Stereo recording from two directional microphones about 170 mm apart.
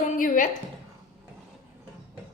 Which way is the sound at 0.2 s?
50° left (ahead or behind).